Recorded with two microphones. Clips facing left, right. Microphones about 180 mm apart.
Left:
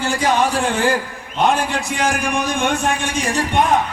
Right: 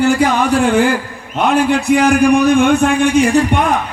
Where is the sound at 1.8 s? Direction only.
60° right (ahead or behind).